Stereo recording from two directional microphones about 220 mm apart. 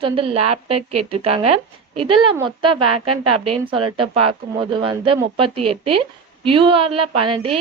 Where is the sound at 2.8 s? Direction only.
90° right.